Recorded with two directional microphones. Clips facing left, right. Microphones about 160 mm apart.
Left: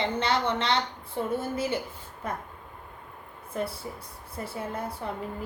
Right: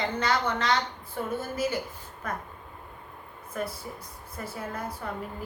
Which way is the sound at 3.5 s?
25° left (ahead or behind).